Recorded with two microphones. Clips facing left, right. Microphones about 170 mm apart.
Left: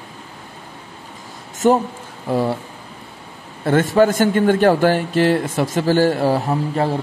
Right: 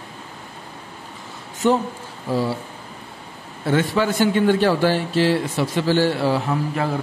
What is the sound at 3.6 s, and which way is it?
Speech, 50° left (ahead or behind).